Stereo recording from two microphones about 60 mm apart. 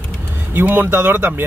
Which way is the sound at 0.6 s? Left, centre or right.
Right.